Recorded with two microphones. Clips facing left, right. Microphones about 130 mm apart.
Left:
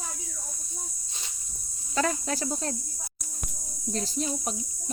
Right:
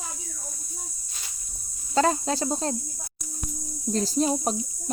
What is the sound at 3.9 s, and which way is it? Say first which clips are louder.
Speech: right 7 dB; 35° right (ahead or behind).